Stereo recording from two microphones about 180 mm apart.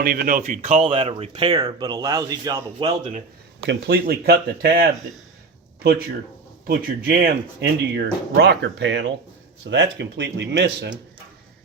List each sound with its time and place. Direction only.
0.0 s speech: 55° right (ahead or behind); by 2.9 s 20° right (ahead or behind)
3.7 s speech: 60° right (ahead or behind)
6.7 s speech: 55° right (ahead or behind)